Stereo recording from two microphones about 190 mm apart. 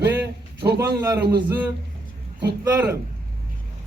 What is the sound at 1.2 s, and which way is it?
Speech, 60° right (ahead or behind).